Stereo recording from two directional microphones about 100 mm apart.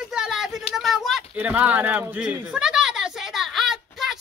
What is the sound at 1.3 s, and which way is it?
A woman's voice, 15° right (ahead or behind).